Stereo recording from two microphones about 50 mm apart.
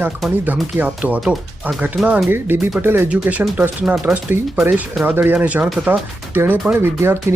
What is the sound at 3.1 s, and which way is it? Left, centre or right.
Speech, right.